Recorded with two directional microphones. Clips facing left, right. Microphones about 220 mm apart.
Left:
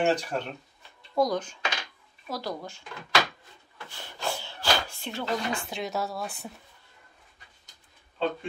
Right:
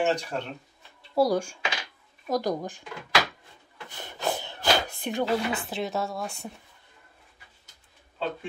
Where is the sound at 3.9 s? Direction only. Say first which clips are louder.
Right 4 dB; 20° right (ahead or behind).